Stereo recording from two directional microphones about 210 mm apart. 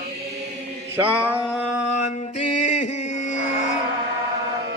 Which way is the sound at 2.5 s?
35° left (ahead or behind).